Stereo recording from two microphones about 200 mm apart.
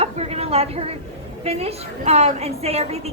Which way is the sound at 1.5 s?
30° right (ahead or behind).